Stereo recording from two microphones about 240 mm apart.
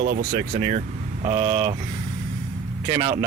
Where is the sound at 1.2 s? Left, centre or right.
Right.